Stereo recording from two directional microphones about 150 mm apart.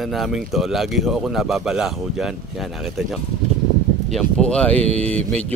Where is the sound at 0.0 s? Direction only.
Centre (ahead or behind).